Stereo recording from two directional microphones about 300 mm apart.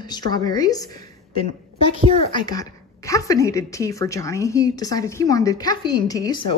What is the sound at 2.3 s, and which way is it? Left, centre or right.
Speech, centre.